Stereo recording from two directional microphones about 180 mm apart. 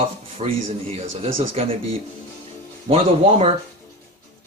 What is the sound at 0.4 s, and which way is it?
Speech, 35° right (ahead or behind).